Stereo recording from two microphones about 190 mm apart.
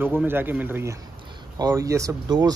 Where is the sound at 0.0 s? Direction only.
10° right (ahead or behind).